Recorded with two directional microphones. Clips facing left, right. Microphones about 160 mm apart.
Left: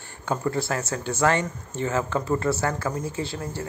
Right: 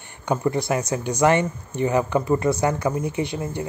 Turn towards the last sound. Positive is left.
turn(degrees=-15)  # may be behind; listen again after turning